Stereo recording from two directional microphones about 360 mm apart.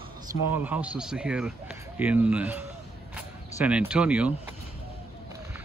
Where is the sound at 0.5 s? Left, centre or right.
Centre.